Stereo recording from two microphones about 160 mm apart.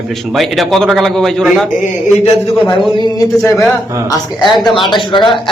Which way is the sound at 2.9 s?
30° left (ahead or behind).